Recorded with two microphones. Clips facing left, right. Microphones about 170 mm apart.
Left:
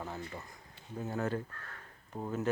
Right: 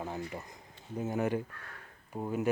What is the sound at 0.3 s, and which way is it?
Speech, 20° right (ahead or behind).